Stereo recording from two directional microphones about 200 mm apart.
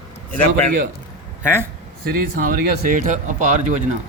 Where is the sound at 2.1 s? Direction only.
45° right (ahead or behind).